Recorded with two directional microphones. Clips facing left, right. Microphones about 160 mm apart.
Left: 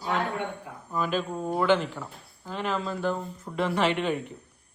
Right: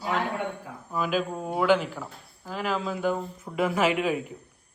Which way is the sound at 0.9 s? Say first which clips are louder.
Right 1 dB; 5° right (ahead or behind).